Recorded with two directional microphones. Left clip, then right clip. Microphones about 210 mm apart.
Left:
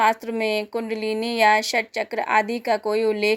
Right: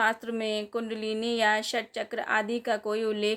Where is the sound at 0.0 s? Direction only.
15° left (ahead or behind).